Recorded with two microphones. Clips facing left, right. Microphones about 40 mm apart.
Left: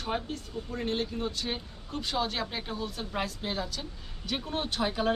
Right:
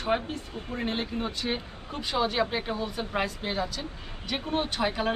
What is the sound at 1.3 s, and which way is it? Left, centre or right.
A woman's voice, centre.